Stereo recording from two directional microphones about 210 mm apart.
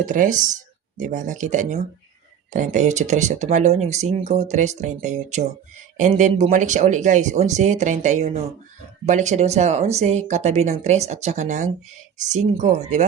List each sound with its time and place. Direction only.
0.0 s speech: 35° right (ahead or behind)